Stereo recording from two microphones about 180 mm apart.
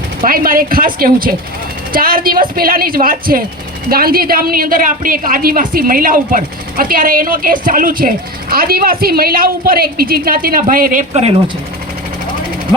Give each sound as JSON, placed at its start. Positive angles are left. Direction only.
{"t": 0.2, "sound": "a woman's voice", "side_deg": -50}
{"t": 11.1, "sound": "speech", "side_deg": -35}